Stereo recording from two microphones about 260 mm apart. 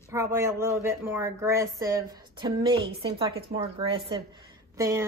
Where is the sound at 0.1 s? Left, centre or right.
Centre.